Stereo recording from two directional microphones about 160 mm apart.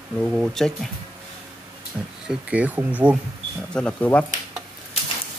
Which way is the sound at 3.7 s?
5° left (ahead or behind).